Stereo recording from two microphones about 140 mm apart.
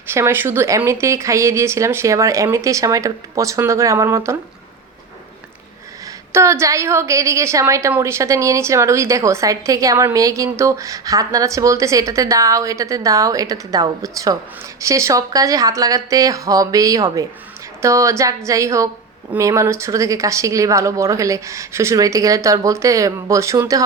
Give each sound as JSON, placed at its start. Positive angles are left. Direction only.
{"t": 0.1, "sound": "a woman's voice", "side_deg": -15}
{"t": 6.3, "sound": "a woman's voice", "side_deg": -20}